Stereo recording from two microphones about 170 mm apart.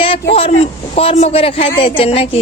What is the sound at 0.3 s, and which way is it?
Speech, 35° left (ahead or behind).